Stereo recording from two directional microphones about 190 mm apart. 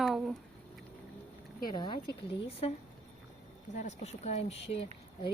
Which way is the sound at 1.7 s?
20° left (ahead or behind).